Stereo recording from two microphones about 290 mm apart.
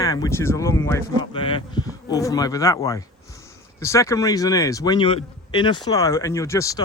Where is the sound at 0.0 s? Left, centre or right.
Centre.